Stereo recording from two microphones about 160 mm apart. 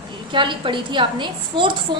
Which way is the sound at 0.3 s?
30° right (ahead or behind).